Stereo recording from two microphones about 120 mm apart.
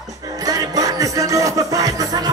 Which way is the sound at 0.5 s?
30° right (ahead or behind).